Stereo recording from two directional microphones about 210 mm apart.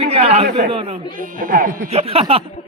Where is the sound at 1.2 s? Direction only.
40° right (ahead or behind).